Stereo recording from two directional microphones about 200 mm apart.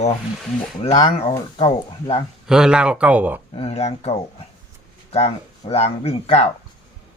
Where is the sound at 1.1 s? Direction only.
30° left (ahead or behind).